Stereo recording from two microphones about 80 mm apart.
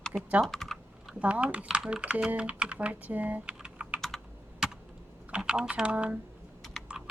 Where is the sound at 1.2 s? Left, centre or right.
Centre.